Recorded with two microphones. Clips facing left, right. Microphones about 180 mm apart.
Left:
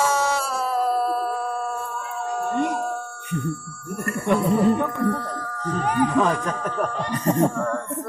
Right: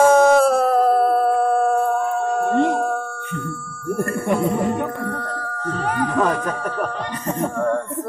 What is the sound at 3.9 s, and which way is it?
Speech, 30° right (ahead or behind).